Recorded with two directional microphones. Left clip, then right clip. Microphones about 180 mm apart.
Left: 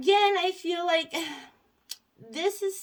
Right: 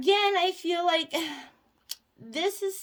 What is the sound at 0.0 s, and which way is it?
Speech, 35° right (ahead or behind).